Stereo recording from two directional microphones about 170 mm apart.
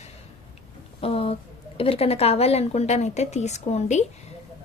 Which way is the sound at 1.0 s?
35° left (ahead or behind).